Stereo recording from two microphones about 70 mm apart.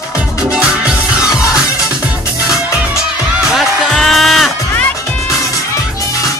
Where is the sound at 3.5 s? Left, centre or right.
Centre.